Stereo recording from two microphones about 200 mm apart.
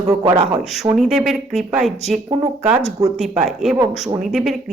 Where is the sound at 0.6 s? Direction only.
Centre (ahead or behind).